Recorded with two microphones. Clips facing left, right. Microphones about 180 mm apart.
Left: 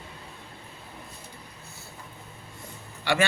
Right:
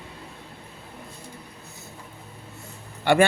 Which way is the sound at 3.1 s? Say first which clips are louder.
Right 7 dB; 55° right (ahead or behind).